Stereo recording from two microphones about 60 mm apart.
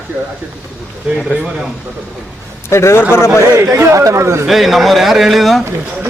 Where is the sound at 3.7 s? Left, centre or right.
Right.